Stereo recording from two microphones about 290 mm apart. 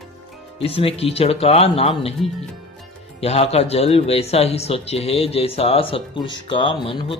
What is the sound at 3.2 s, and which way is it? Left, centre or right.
Speech, left.